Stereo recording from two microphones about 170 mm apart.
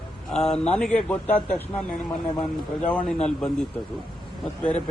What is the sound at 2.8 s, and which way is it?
Speech, 5° left (ahead or behind).